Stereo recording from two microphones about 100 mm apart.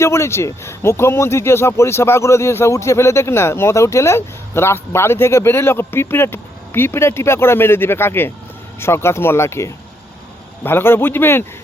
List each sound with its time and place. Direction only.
0.0 s speech: 25° left (ahead or behind)